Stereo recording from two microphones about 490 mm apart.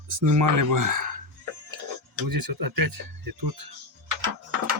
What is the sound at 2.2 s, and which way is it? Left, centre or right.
Speech, right.